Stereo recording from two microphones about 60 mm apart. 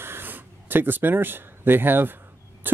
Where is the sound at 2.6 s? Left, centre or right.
Right.